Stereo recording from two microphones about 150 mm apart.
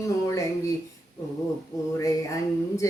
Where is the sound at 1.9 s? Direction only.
20° left (ahead or behind).